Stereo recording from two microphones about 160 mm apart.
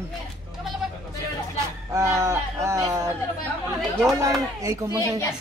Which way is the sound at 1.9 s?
20° right (ahead or behind).